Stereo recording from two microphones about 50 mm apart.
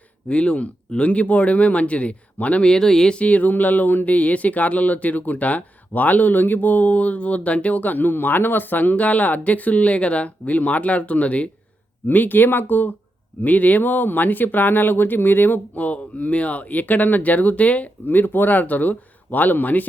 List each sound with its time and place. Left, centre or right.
0.3 s speech: left
2.6 s speech: centre
3.2 s speech: left